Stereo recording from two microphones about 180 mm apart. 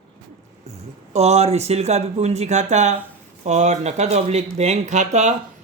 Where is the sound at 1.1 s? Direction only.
35° right (ahead or behind).